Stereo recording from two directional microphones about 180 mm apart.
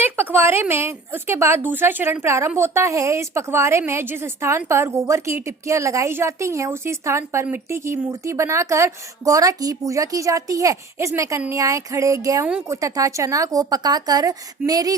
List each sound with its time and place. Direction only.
0.0 s a woman's voice: 10° right (ahead or behind)